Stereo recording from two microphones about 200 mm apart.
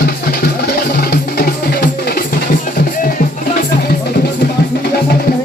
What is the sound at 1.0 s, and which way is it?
Music, 50° left (ahead or behind).